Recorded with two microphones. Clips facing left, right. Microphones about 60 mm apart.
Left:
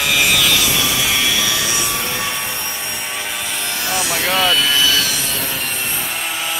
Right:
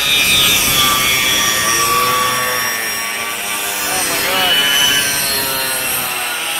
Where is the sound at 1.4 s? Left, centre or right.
Right.